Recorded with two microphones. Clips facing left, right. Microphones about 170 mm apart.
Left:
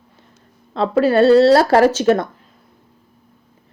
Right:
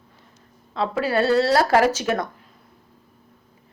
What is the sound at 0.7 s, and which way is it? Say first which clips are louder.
Speech: left 8 dB; 25° left (ahead or behind).